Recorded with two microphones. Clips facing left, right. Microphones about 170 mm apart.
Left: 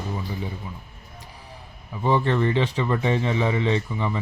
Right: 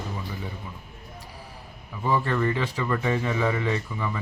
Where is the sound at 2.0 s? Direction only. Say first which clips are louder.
Left 3 dB; 25° left (ahead or behind).